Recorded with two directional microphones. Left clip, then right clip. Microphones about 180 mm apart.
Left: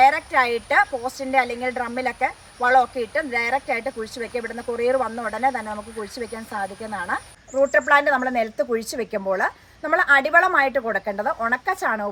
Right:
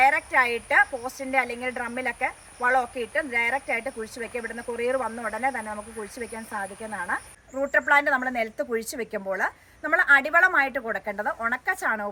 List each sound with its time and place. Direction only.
0.0 s a woman's voice: 10° left (ahead or behind)